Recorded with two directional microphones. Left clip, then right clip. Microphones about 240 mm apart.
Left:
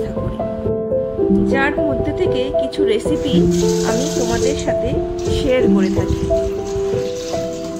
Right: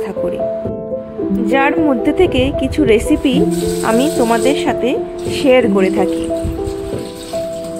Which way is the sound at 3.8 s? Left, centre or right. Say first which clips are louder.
Right 5 dB; right.